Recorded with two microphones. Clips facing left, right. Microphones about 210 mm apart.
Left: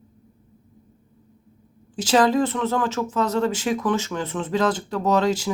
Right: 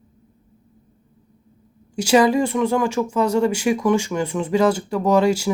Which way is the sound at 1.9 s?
10° right (ahead or behind).